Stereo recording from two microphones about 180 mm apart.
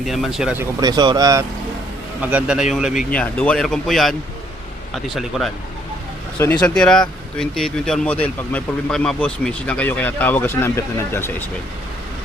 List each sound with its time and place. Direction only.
0.0 s speech: centre (ahead or behind); by 1.5 s 20° right (ahead or behind)
2.2 s speech: 5° right (ahead or behind)
3.2 s speech: 5° left (ahead or behind)
6.4 s speech: 10° left (ahead or behind)